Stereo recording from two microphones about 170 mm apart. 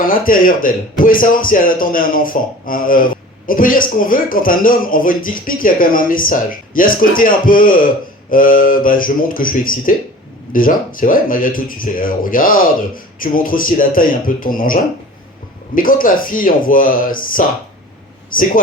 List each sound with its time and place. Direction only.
0.0 s a man's voice: 55° left (ahead or behind)